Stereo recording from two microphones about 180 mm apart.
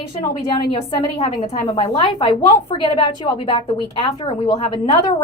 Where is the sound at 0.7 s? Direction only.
30° left (ahead or behind).